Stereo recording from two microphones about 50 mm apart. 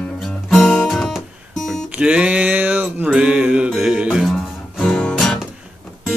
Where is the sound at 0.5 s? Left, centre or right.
Centre.